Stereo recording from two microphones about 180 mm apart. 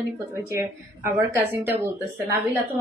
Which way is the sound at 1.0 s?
10° right (ahead or behind).